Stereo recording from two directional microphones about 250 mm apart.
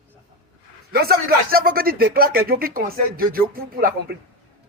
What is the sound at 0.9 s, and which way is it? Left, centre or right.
Speech, right.